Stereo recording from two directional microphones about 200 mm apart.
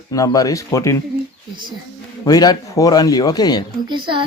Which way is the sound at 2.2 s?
20° left (ahead or behind).